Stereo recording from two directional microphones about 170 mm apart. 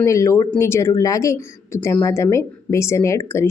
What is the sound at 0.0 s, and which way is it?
A woman's voice, 15° left (ahead or behind).